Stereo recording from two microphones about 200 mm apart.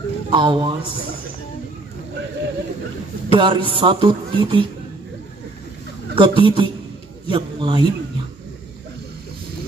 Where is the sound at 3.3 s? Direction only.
25° right (ahead or behind).